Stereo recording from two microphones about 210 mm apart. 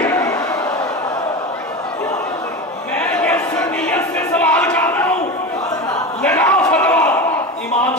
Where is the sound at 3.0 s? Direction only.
5° left (ahead or behind).